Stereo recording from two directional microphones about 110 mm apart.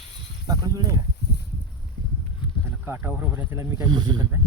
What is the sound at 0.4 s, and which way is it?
Speech, 35° right (ahead or behind).